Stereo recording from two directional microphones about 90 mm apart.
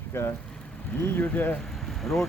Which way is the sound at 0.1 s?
30° left (ahead or behind).